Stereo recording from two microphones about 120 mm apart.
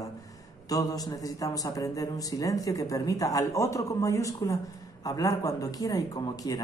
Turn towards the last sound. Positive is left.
turn(degrees=30)  # may be behind; listen again after turning